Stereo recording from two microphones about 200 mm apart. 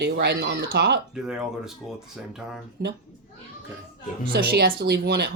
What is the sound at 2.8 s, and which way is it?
Speech, 50° right (ahead or behind).